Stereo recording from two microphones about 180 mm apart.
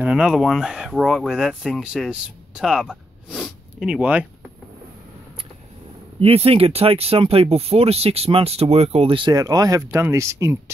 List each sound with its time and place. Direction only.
0.0 s speech: 5° right (ahead or behind)
6.1 s speech: 35° right (ahead or behind); by 10.6 s 15° right (ahead or behind)